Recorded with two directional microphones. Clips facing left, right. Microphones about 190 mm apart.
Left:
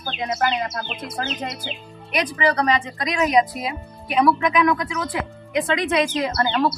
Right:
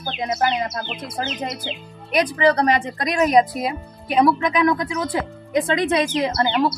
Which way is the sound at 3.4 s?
35° right (ahead or behind).